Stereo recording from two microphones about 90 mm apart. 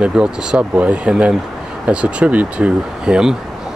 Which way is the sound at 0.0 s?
10° right (ahead or behind).